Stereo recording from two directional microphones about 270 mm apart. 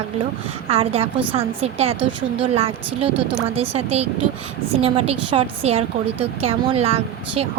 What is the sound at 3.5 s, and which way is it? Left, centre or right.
A woman's voice, right.